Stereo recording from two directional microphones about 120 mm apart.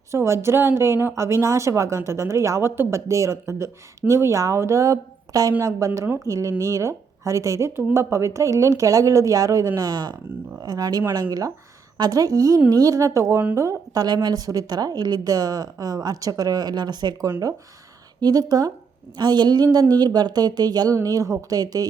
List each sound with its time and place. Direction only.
0.1 s speech: 25° right (ahead or behind)